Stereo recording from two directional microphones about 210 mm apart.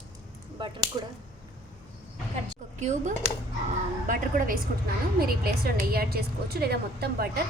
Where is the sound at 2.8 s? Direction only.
35° right (ahead or behind).